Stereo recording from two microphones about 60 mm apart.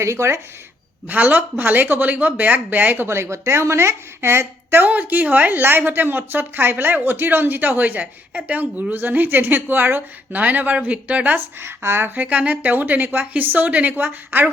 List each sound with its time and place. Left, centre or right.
0.0 s a woman's voice: right
1.0 s a woman's voice: right
3.1 s a woman's voice: right
4.9 s a woman's voice: right
11.3 s a woman's voice: right